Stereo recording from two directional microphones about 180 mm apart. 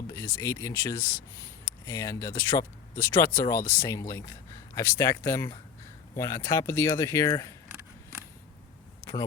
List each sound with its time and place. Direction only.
0.3 s speech: 15° left (ahead or behind)